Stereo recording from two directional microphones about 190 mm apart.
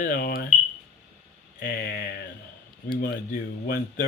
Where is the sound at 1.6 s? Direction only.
55° left (ahead or behind).